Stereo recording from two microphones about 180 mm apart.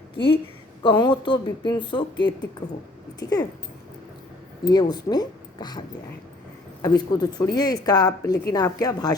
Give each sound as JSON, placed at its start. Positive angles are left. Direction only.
{"t": 0.8, "sound": "a woman's voice", "side_deg": 25}
{"t": 4.6, "sound": "a woman's voice", "side_deg": 20}
{"t": 6.8, "sound": "a woman's voice", "side_deg": 20}